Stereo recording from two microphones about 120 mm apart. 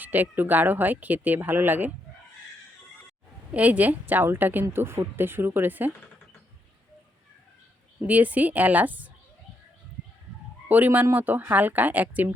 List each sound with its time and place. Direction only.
0.0 s speech: 15° right (ahead or behind)
3.5 s speech: 10° right (ahead or behind)
8.0 s speech: 15° right (ahead or behind)
10.7 s speech: 15° right (ahead or behind)